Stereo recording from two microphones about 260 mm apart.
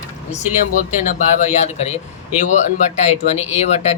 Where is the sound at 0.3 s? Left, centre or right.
Left.